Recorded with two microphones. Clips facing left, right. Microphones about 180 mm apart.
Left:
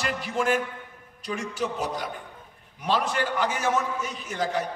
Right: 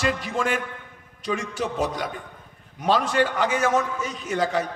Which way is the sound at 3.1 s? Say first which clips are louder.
Right 5 dB; 90° right.